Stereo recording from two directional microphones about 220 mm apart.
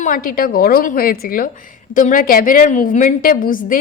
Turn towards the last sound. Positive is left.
turn(degrees=40)  # may be behind; listen again after turning